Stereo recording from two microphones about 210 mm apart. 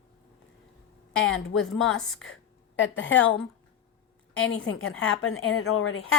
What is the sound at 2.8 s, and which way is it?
Speech, 65° left (ahead or behind).